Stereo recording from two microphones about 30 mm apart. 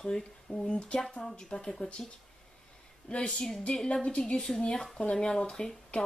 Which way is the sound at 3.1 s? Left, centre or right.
Left.